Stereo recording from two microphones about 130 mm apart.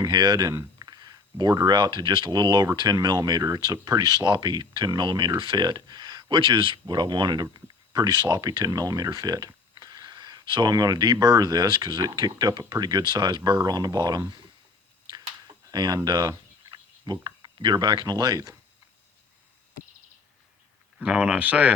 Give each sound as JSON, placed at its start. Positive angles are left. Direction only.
{"t": 0.0, "sound": "speech", "side_deg": -30}
{"t": 15.0, "sound": "turkey", "side_deg": -35}
{"t": 21.0, "sound": "speech", "side_deg": -10}